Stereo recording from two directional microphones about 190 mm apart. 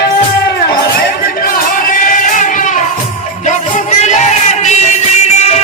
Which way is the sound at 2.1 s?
45° left (ahead or behind).